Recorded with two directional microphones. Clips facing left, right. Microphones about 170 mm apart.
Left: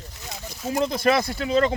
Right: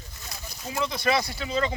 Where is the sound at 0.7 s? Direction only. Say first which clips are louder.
Left 5 dB; 45° left (ahead or behind).